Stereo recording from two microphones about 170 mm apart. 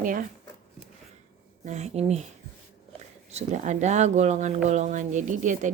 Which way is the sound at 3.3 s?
40° right (ahead or behind).